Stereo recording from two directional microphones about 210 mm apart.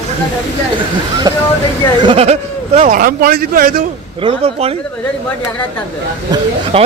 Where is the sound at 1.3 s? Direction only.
15° right (ahead or behind).